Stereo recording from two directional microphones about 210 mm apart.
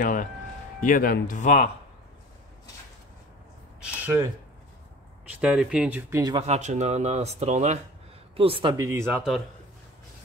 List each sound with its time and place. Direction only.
0.0 s speech: 40° left (ahead or behind)
3.8 s a sound: 10° right (ahead or behind)
5.4 s speech: 5° right (ahead or behind)
6.3 s speech: 30° right (ahead or behind); by 9.4 s 5° right (ahead or behind)